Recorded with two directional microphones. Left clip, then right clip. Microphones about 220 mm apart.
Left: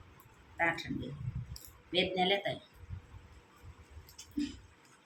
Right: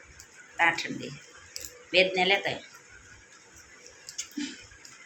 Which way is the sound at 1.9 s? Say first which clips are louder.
Right 8 dB; 15° left (ahead or behind).